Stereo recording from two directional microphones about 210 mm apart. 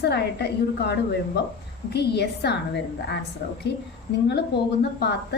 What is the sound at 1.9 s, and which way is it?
Speech, 50° left (ahead or behind).